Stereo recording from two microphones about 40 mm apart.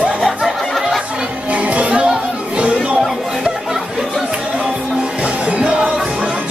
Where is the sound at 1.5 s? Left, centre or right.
Right.